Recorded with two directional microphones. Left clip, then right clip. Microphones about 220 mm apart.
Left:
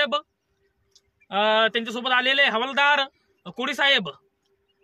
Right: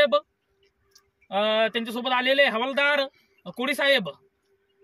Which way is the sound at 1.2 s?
10° left (ahead or behind).